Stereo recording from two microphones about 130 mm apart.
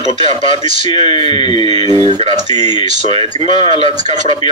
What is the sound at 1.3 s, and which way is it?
Speech, 35° left (ahead or behind).